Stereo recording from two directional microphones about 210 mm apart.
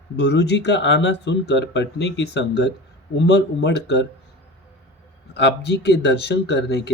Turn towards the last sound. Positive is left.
turn(degrees=55)  # may be behind; listen again after turning